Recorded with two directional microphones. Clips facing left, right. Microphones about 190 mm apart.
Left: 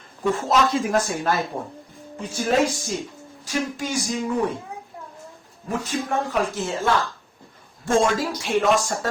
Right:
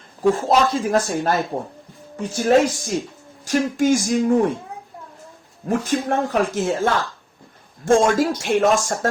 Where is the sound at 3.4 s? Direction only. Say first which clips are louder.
Right 8 dB; 50° right (ahead or behind).